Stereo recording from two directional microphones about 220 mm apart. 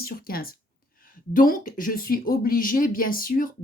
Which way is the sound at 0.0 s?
45° left (ahead or behind).